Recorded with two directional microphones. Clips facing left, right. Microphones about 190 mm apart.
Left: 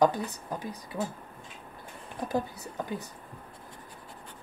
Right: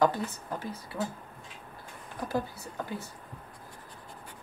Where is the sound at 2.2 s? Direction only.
20° left (ahead or behind).